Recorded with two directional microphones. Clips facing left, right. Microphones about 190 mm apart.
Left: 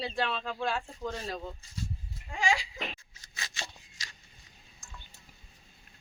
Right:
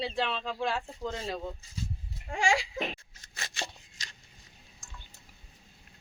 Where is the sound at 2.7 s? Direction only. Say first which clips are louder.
Right 5 dB; 50° right (ahead or behind).